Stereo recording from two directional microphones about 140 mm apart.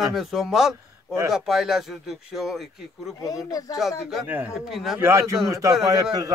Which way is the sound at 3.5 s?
25° left (ahead or behind).